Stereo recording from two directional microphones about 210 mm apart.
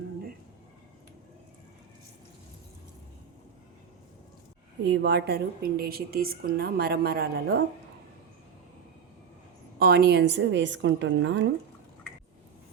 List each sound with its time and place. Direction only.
4.8 s a woman's voice: 55° right (ahead or behind)
9.7 s a woman's voice: 50° right (ahead or behind)